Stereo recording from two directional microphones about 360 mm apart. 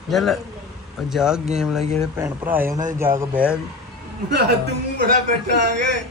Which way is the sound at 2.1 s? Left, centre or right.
Centre.